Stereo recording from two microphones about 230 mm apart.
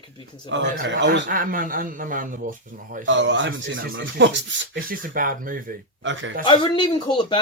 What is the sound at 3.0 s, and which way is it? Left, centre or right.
Speech, right.